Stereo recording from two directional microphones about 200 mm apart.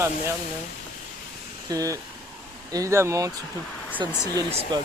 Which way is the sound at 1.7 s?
15° right (ahead or behind).